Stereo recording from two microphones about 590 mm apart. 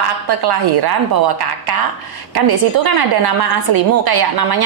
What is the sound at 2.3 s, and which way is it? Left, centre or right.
A woman's voice, right.